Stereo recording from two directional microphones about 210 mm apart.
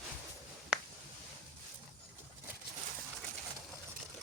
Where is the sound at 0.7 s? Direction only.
5° right (ahead or behind).